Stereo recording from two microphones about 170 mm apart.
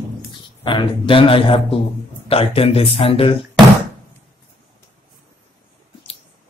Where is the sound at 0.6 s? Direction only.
30° left (ahead or behind).